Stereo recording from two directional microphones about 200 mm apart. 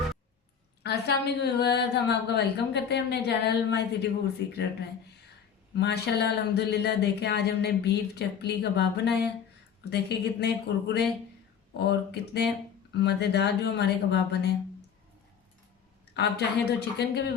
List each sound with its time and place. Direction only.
0.8 s speech: 55° left (ahead or behind)
5.7 s speech: 55° left (ahead or behind)
16.1 s speech: 55° left (ahead or behind)